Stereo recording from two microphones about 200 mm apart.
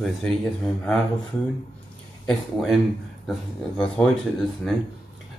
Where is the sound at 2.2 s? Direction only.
Centre (ahead or behind).